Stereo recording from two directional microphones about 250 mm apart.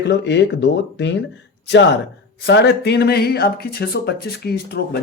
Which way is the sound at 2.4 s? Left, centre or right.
Left.